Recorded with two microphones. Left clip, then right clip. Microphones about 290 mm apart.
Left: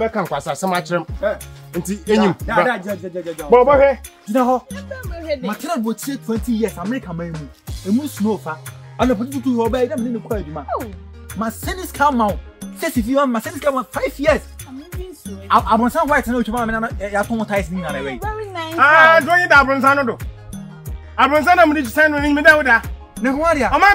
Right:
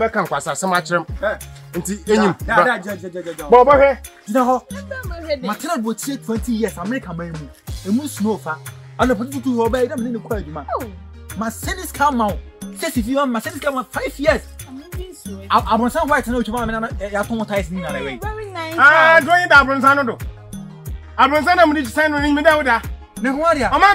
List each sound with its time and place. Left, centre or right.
0.0 s speech: centre
18.2 s music: centre
18.8 s speech: centre
21.2 s speech: centre
22.8 s speech: centre